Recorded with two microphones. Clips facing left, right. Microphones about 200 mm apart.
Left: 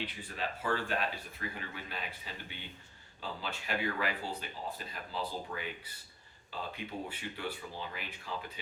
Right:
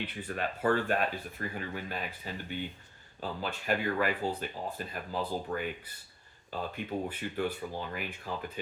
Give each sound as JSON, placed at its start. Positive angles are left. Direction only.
{"t": 0.0, "sound": "speech", "side_deg": -55}